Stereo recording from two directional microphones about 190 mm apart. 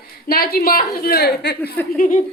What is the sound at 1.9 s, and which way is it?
Speech, 45° left (ahead or behind).